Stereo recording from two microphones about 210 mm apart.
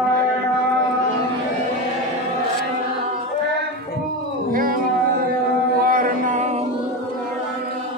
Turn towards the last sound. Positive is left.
turn(degrees=-40)  # may be behind; listen again after turning